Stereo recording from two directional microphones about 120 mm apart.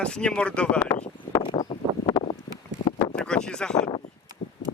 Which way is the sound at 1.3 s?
35° left (ahead or behind).